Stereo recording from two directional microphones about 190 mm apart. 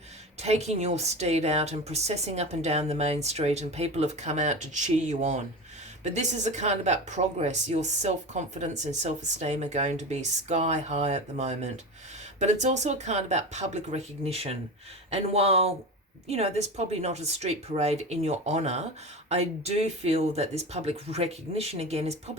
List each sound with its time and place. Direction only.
0.4 s speech: 35° right (ahead or behind)